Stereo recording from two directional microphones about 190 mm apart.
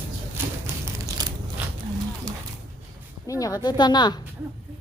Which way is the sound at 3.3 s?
20° left (ahead or behind).